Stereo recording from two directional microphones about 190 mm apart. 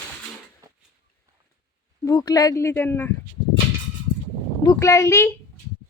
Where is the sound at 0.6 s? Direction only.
15° right (ahead or behind).